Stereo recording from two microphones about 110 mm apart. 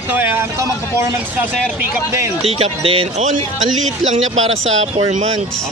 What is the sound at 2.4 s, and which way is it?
Speech, 60° right (ahead or behind).